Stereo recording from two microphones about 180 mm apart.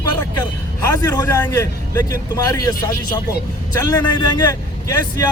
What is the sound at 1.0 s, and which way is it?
Speech, 20° left (ahead or behind).